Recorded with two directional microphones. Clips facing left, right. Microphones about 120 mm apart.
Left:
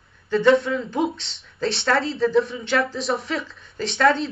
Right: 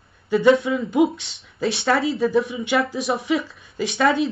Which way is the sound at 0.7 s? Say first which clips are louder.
Right 4 dB; 10° right (ahead or behind).